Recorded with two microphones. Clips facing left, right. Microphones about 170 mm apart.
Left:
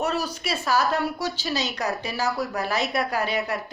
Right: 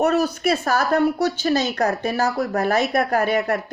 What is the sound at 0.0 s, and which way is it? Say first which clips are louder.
A woman's voice: right 8 dB; 50° right (ahead or behind).